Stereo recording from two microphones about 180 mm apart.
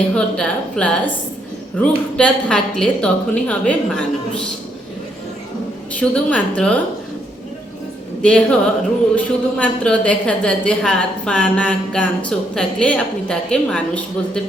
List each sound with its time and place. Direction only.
0.1 s a woman's voice: 5° left (ahead or behind)
6.0 s a woman's voice: 5° left (ahead or behind)
8.2 s a woman's voice: 5° left (ahead or behind)